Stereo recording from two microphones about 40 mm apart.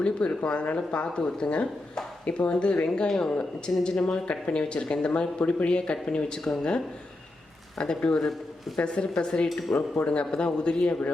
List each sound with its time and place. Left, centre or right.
0.0 s speech: left
2.2 s speech: left
8.3 s a man's voice: centre
8.8 s speech: left
9.7 s speech: left
10.1 s speech: left